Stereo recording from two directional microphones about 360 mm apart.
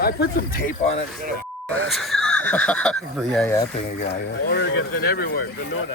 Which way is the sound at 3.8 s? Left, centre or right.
Left.